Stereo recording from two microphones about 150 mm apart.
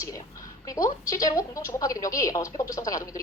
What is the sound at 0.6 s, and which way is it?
A woman's voice, 25° left (ahead or behind).